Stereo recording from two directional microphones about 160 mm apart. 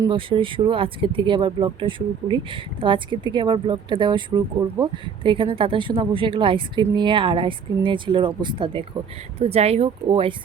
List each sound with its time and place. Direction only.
0.0 s speech: 30° right (ahead or behind)